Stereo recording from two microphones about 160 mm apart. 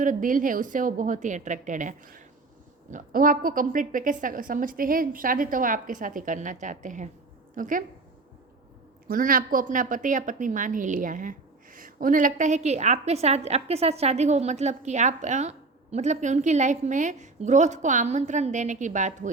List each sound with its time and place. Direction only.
0.0 s a woman's voice: 55° right (ahead or behind)
9.0 s a woman's voice: 60° right (ahead or behind)